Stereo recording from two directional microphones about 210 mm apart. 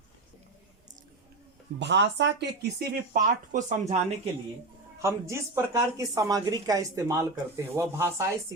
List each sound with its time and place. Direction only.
1.8 s speech: 55° right (ahead or behind); by 4.0 s 35° right (ahead or behind)
5.0 s a woman's voice: 15° right (ahead or behind)